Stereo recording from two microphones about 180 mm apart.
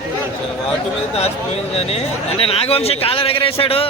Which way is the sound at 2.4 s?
35° left (ahead or behind).